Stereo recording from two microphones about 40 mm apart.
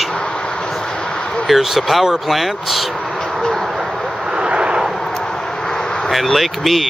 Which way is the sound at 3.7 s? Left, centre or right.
Centre.